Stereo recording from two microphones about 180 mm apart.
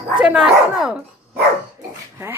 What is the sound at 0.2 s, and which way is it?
Speech, 5° right (ahead or behind).